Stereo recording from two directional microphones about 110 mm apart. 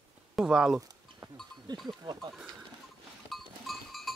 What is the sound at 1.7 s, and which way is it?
Speech, 40° right (ahead or behind).